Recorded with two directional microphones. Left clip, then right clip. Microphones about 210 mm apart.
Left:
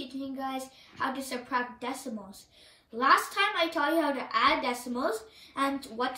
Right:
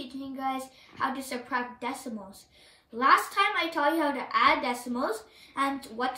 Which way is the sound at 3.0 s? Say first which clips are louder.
Right 2 dB; 15° right (ahead or behind).